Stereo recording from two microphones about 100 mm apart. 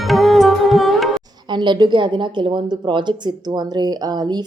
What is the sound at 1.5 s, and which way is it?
A woman's voice, 50° right (ahead or behind).